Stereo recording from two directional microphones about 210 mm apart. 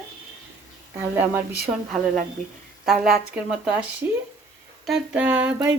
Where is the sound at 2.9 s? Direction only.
5° right (ahead or behind).